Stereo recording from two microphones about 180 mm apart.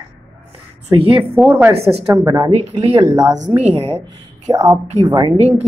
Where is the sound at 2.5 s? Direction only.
35° right (ahead or behind).